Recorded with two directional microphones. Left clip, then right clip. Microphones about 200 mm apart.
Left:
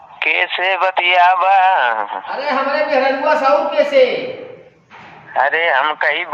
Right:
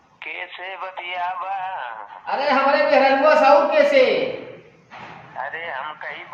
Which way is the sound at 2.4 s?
Centre (ahead or behind).